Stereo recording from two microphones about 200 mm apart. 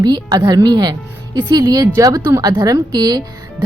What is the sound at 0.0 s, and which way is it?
Speech, 20° right (ahead or behind).